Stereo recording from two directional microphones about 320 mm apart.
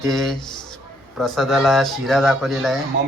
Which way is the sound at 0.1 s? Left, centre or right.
Centre.